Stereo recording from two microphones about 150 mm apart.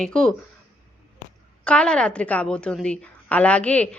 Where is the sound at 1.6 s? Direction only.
5° left (ahead or behind).